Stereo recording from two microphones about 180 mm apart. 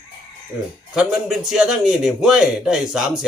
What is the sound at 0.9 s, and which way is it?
Speech, centre (ahead or behind).